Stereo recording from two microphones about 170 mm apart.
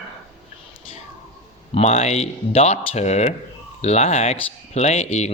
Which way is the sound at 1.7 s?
40° left (ahead or behind).